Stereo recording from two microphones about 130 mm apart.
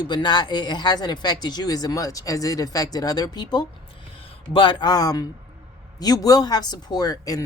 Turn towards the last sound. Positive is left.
turn(degrees=30)  # may be behind; listen again after turning